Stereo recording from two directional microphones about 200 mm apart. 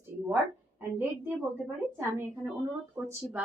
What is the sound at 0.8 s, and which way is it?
A woman's voice, 10° right (ahead or behind).